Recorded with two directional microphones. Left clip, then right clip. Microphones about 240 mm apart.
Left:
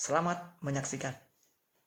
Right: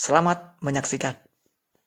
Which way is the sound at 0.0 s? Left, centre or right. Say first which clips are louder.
Right 11 dB; right.